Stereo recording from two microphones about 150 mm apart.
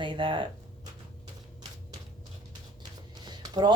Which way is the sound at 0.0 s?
35° right (ahead or behind).